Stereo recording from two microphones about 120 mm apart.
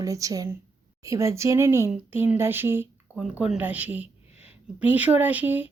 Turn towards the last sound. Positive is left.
turn(degrees=-15)  # may be behind; listen again after turning